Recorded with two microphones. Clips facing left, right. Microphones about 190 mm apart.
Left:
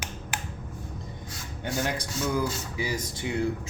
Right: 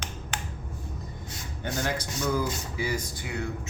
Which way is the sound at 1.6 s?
15° left (ahead or behind).